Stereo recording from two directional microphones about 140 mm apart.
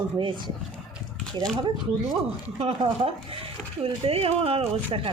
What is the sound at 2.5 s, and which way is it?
Speech, 40° right (ahead or behind).